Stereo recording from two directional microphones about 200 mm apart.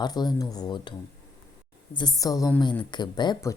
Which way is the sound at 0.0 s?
20° left (ahead or behind).